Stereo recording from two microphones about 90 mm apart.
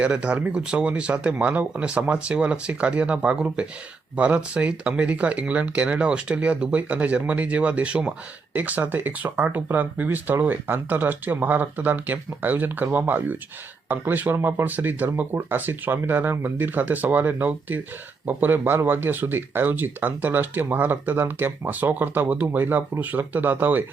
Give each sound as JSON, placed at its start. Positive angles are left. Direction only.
{"t": 0.0, "sound": "speech", "side_deg": -10}